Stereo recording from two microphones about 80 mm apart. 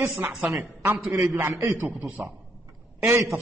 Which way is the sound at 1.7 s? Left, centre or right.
Centre.